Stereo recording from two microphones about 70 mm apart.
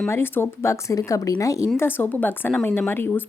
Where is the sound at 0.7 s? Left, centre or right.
Left.